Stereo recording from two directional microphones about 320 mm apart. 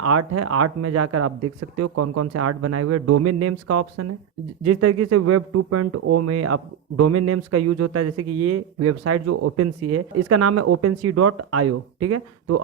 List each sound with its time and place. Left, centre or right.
0.0 s speech: right